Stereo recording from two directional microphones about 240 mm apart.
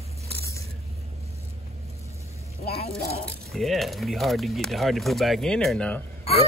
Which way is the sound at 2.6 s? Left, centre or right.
Left.